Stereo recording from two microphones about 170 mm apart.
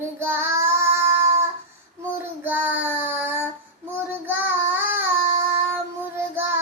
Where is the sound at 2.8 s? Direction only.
10° right (ahead or behind).